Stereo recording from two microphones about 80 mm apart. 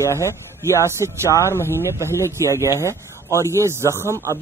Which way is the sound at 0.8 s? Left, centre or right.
Right.